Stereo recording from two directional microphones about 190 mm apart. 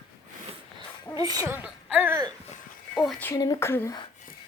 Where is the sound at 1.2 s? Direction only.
15° right (ahead or behind).